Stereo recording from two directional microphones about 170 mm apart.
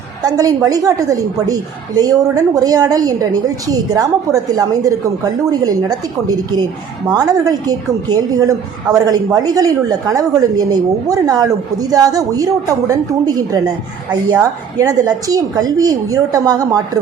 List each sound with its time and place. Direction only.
0.2 s a woman's voice: 20° right (ahead or behind)
14.8 s a woman's voice: 20° right (ahead or behind)